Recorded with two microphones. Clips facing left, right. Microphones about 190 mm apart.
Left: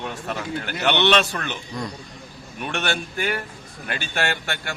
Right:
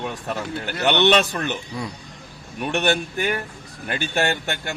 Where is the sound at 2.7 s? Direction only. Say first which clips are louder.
Right 5 dB; 15° right (ahead or behind).